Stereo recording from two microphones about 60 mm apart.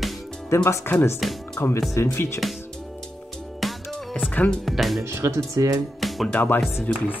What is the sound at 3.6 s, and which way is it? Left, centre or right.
Music, centre.